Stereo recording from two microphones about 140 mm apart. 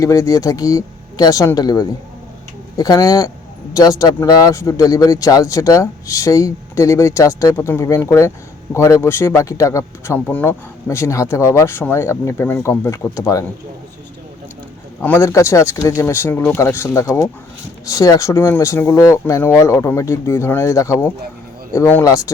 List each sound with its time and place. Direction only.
0.0 s speech: 20° left (ahead or behind)
15.0 s speech: 15° left (ahead or behind)